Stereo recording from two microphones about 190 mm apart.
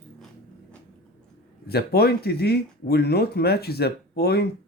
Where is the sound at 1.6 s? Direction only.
55° left (ahead or behind).